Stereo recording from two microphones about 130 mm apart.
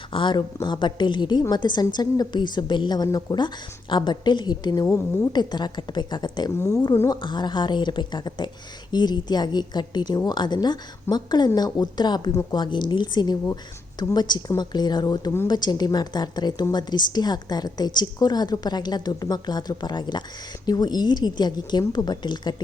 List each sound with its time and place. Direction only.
0.1 s a woman's voice: 40° left (ahead or behind)
6.5 s speech: 25° left (ahead or behind)
7.1 s a woman's voice: 35° left (ahead or behind)